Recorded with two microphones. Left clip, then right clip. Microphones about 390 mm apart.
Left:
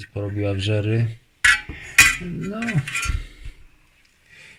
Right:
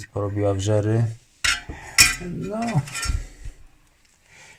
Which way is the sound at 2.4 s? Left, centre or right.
Right.